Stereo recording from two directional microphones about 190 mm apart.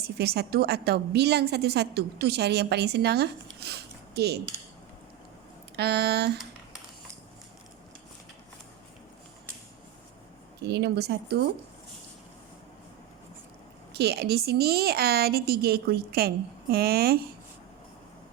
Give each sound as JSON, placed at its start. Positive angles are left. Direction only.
{"t": 0.0, "sound": "a woman's voice", "side_deg": -55}
{"t": 5.7, "sound": "a woman's voice", "side_deg": -60}
{"t": 10.6, "sound": "a woman's voice", "side_deg": -60}
{"t": 13.9, "sound": "a woman's voice", "side_deg": -55}